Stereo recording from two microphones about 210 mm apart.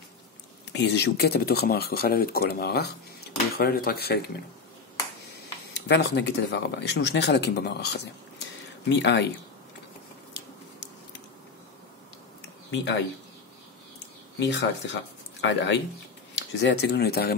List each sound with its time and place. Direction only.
0.7 s speech: 55° left (ahead or behind)
5.7 s speech: 55° left (ahead or behind)
12.7 s speech: 55° left (ahead or behind)
14.4 s speech: 60° left (ahead or behind)